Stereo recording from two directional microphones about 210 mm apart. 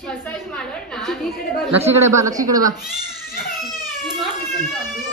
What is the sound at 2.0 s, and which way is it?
Speech, 15° right (ahead or behind).